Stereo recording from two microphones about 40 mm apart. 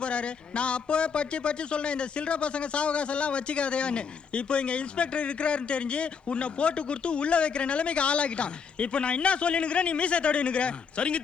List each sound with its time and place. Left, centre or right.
0.0 s a man's voice: left